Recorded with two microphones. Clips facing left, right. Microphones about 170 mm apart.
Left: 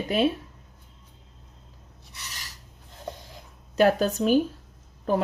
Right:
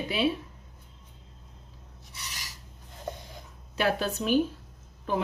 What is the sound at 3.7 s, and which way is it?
Speech, 45° left (ahead or behind).